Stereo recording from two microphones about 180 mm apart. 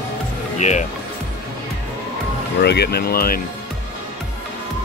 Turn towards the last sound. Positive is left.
turn(degrees=55)  # may be behind; listen again after turning